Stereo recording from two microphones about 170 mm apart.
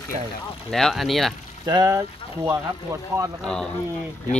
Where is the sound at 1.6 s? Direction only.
20° right (ahead or behind).